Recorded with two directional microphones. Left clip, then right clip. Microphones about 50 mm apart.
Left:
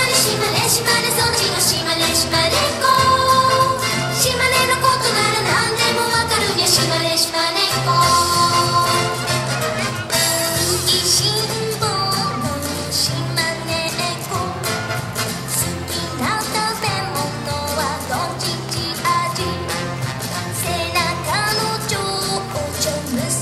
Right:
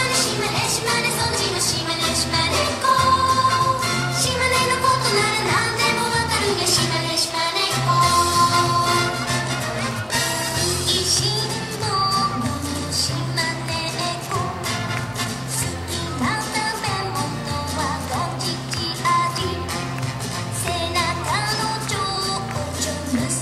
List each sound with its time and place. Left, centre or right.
0.1 s music: left
21.0 s music: left